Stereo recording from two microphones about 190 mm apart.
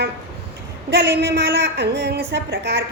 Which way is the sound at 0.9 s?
60° right (ahead or behind).